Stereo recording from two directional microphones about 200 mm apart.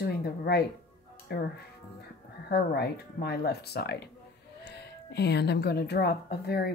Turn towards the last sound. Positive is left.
turn(degrees=50)  # may be behind; listen again after turning